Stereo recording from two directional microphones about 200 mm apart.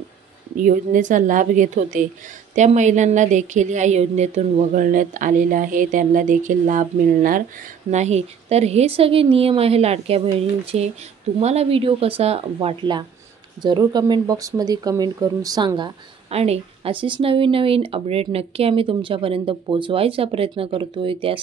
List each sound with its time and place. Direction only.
0.6 s speech: 40° right (ahead or behind)